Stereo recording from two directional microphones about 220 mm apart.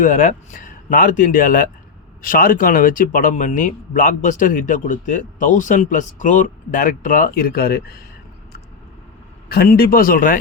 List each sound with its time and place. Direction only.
0.0 s speech: 35° left (ahead or behind)
9.5 s speech: 45° left (ahead or behind)